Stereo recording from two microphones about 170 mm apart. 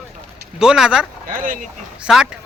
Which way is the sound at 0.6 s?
5° right (ahead or behind).